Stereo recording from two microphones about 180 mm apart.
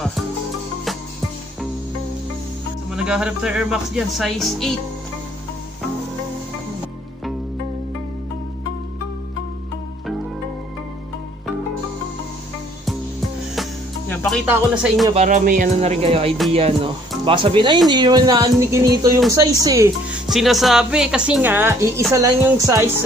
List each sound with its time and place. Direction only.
2.9 s speech: 5° right (ahead or behind)
14.0 s music: 5° left (ahead or behind)
14.4 s speech: 5° right (ahead or behind)
15.1 s speech: 45° right (ahead or behind)
15.8 s speech: 35° right (ahead or behind); by 19.9 s 20° right (ahead or behind)
20.2 s speech: centre (ahead or behind)